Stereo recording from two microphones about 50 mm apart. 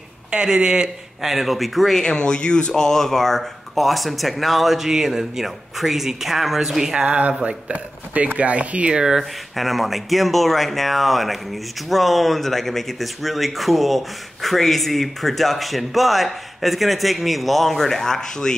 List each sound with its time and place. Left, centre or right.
0.3 s speech: centre
1.2 s speech: centre
7.1 s speech: right
8.9 s speech: centre
9.6 s speech: centre